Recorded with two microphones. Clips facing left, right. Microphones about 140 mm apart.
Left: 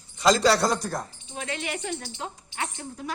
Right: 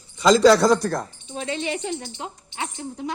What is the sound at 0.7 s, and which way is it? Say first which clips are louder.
Speech: right 8 dB; 90° right.